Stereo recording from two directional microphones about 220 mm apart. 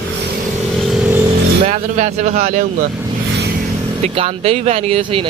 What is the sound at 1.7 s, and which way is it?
Speech, 30° right (ahead or behind).